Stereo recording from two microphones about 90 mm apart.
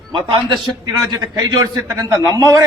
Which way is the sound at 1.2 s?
40° right (ahead or behind).